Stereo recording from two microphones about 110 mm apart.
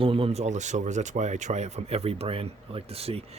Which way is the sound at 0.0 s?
55° right (ahead or behind).